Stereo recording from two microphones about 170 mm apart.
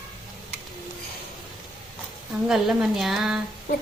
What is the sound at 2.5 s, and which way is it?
Speech, centre (ahead or behind).